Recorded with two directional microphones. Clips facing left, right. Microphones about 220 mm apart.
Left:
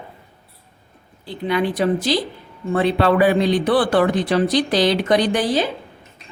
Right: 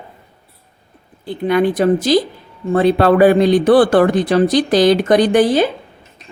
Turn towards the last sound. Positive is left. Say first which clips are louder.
# right 7 dB
turn(degrees=-55)  # may be behind; listen again after turning